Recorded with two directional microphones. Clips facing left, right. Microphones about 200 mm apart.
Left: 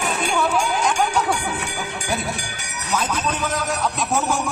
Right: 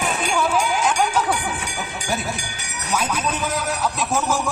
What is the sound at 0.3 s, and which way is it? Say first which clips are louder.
Music: right 1 dB; centre (ahead or behind).